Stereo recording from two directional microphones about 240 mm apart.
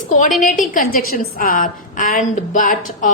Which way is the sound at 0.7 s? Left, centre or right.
Left.